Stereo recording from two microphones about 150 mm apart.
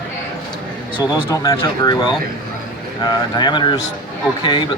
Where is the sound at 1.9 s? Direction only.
30° left (ahead or behind).